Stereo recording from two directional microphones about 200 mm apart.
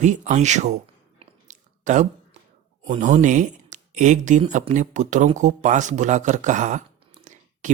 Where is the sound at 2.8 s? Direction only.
35° right (ahead or behind).